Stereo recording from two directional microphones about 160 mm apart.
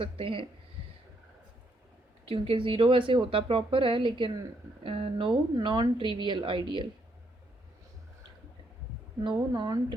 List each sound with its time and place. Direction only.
0.0 s a woman's voice: 35° right (ahead or behind)
2.2 s a woman's voice: 35° right (ahead or behind)
9.5 s a woman's voice: 25° right (ahead or behind)